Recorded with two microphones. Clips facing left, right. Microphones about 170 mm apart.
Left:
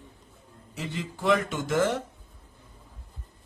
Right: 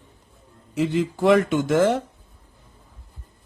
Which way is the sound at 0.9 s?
60° right (ahead or behind).